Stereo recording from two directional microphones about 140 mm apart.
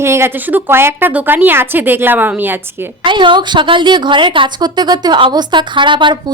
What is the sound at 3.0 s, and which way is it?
A woman's voice, 35° right (ahead or behind).